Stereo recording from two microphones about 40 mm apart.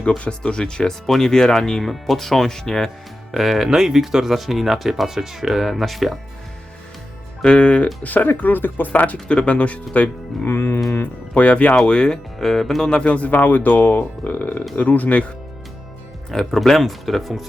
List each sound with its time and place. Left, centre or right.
0.3 s speech: left
3.3 s speech: centre
7.4 s speech: left
8.0 s speech: left
8.9 s speech: left
9.2 s speech: left
10.4 s music: left
11.0 s speech: left; by 12.9 s centre
12.9 s speech: left
13.1 s speech: left
16.3 s speech: centre